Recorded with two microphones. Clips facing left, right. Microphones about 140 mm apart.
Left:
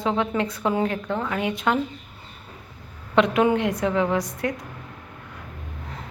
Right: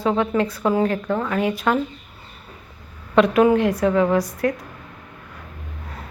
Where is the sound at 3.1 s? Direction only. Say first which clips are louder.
Right 4 dB; 20° left (ahead or behind).